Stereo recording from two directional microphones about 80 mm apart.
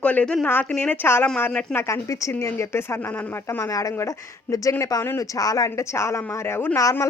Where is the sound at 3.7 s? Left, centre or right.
Left.